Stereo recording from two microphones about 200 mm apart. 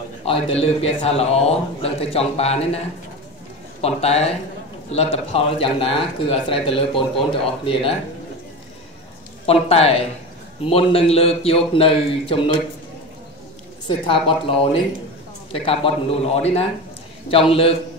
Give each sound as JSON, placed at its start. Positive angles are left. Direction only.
{"t": 0.2, "sound": "a man's voice", "side_deg": 30}
{"t": 3.8, "sound": "a man's voice", "side_deg": 30}
{"t": 9.5, "sound": "speech", "side_deg": 30}
{"t": 13.8, "sound": "speech", "side_deg": 25}